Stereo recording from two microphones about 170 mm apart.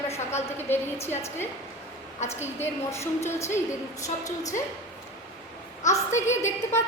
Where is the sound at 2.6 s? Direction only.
15° left (ahead or behind).